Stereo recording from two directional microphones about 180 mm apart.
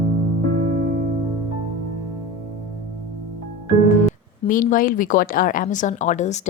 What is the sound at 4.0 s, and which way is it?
Speech, 45° left (ahead or behind).